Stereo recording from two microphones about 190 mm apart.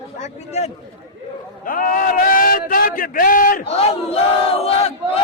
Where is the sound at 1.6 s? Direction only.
45° left (ahead or behind).